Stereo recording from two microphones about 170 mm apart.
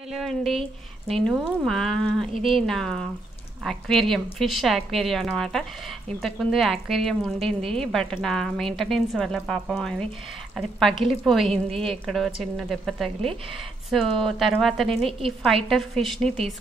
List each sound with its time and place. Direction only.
0.1 s speech: centre (ahead or behind)
15.0 s a woman's voice: 35° right (ahead or behind)
15.4 s speech: centre (ahead or behind)